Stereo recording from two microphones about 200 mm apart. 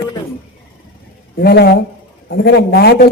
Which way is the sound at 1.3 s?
50° left (ahead or behind).